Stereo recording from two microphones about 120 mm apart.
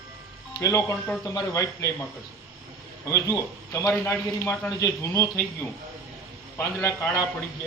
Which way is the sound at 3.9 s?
15° left (ahead or behind).